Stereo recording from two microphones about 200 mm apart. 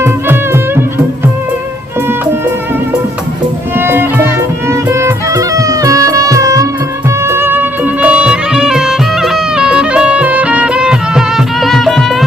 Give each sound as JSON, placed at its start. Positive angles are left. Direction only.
{"t": 0.0, "sound": "music", "side_deg": -10}
{"t": 3.8, "sound": "music", "side_deg": -10}